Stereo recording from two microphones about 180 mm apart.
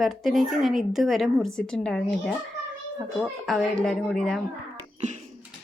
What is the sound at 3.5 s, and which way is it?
Speech, centre (ahead or behind).